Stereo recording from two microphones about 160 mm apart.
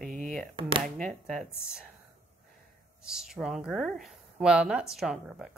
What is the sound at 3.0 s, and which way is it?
Speech, 5° right (ahead or behind).